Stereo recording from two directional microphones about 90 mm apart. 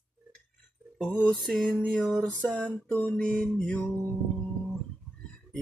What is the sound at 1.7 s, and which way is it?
Music, 10° left (ahead or behind).